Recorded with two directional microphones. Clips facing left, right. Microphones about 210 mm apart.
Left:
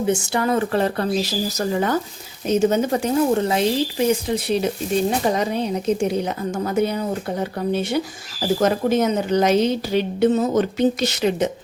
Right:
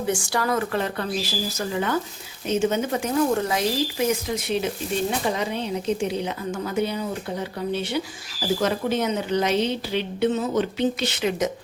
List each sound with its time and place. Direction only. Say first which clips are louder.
0.1 s speech: left 3 dB; 20° left (ahead or behind)
0.7 s a woman's voice: left 6 dB; 35° left (ahead or behind)